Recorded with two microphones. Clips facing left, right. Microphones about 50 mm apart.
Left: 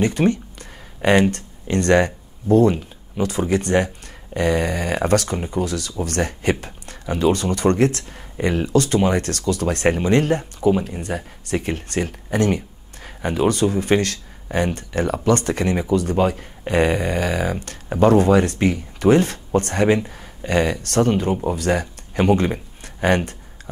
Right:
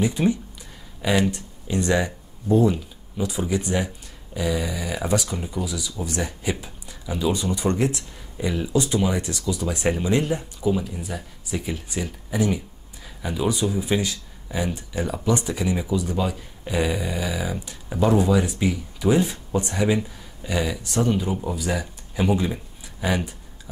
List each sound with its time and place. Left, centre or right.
0.0 s a sound: left
1.3 s speech: left
11.5 s speech: left
16.2 s speech: left
21.1 s speech: left
21.5 s speech: left